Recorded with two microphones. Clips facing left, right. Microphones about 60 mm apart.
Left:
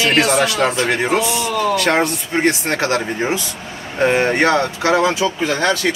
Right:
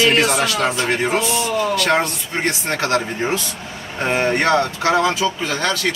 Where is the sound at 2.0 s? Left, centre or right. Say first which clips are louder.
Left 5 dB; left.